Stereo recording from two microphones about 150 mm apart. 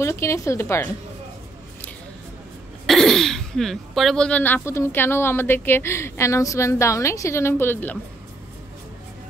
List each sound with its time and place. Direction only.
0.0 s speech: 20° left (ahead or behind)
2.9 s throat clearing: centre (ahead or behind)
4.6 s a woman's voice: 15° left (ahead or behind)